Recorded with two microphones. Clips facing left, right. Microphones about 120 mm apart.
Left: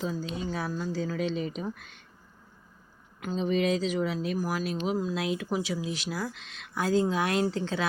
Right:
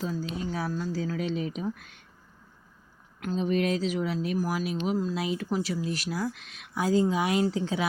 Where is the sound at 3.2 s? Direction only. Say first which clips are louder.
Even; centre (ahead or behind).